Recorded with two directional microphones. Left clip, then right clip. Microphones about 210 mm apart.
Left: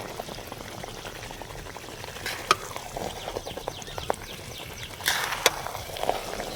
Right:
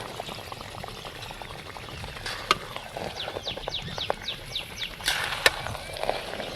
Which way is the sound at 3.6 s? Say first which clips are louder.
Right 3 dB; 20° left (ahead or behind).